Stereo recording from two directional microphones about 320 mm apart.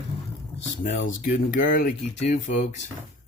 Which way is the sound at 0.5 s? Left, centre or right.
Left.